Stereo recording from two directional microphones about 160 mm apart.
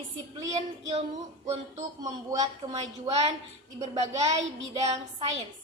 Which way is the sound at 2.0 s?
20° right (ahead or behind).